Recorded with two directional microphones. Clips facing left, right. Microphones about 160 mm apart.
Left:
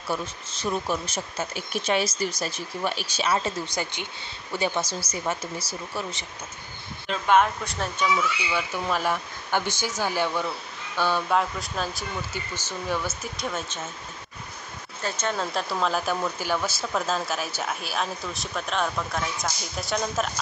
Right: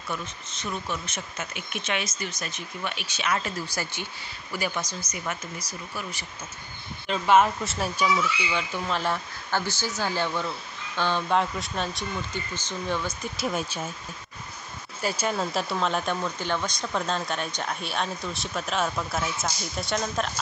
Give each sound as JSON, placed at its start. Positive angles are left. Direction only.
{"t": 0.1, "sound": "speech", "side_deg": 35}
{"t": 3.3, "sound": "speech", "side_deg": 25}
{"t": 5.4, "sound": "speech", "side_deg": 5}
{"t": 7.2, "sound": "speech", "side_deg": 0}
{"t": 8.5, "sound": "speech", "side_deg": 10}
{"t": 13.5, "sound": "speech", "side_deg": -10}
{"t": 15.0, "sound": "speech", "side_deg": -10}